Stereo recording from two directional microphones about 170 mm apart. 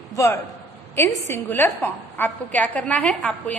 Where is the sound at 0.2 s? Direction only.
20° left (ahead or behind).